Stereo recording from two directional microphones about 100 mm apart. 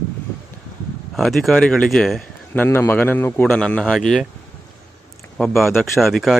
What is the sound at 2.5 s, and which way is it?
A man's voice, 20° left (ahead or behind).